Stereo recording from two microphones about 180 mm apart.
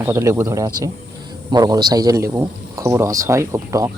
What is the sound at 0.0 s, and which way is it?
Speech, 15° right (ahead or behind).